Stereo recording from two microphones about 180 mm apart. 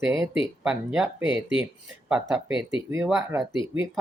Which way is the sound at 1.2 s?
90° right.